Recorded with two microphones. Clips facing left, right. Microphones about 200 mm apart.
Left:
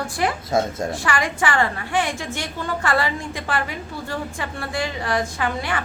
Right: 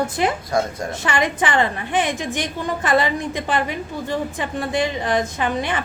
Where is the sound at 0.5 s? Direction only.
25° left (ahead or behind).